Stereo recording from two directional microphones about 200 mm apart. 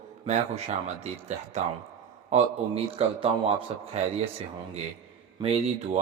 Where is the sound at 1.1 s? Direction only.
35° right (ahead or behind).